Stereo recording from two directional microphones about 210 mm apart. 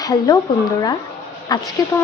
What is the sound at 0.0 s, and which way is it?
Speech, 15° left (ahead or behind).